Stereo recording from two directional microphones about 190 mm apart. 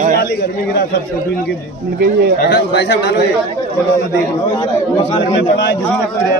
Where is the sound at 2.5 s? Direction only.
65° left (ahead or behind).